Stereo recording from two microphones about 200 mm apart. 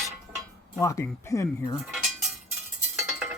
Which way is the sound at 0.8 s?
15° left (ahead or behind).